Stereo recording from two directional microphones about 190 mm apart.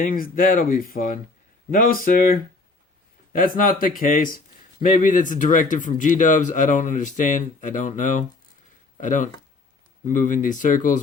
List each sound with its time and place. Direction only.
0.0 s speech: 50° left (ahead or behind)